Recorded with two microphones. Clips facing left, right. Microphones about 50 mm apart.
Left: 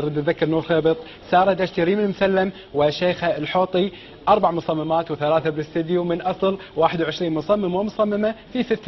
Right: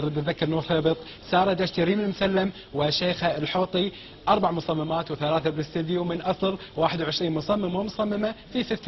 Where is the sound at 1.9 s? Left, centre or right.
Left.